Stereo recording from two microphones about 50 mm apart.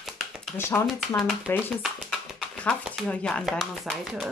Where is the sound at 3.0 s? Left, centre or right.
Centre.